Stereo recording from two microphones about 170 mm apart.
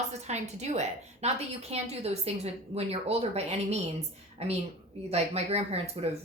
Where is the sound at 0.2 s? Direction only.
40° right (ahead or behind).